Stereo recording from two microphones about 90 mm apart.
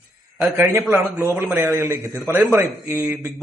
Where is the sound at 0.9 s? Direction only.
30° right (ahead or behind).